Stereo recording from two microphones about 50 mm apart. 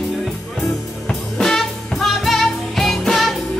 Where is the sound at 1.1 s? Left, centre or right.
Centre.